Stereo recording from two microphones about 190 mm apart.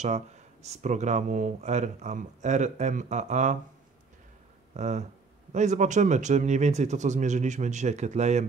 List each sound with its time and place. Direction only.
0.0 s speech: 35° right (ahead or behind)
4.7 s speech: 35° right (ahead or behind)